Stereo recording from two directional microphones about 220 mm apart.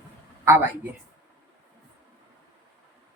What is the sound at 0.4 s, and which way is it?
Speech, 10° right (ahead or behind).